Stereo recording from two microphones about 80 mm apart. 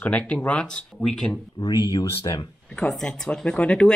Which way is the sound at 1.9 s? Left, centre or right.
Left.